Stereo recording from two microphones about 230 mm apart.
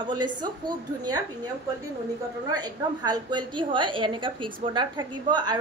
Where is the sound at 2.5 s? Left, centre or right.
Centre.